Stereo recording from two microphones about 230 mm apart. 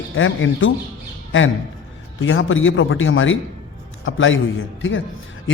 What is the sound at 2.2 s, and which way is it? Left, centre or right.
A man's voice, left.